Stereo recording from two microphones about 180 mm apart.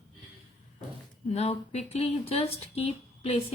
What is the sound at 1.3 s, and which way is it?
Speech, 35° left (ahead or behind).